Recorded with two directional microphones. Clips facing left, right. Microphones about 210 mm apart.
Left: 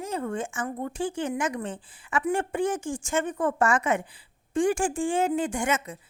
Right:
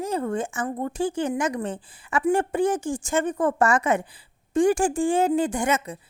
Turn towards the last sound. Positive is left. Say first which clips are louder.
# right 3 dB
turn(degrees=-35)  # may be behind; listen again after turning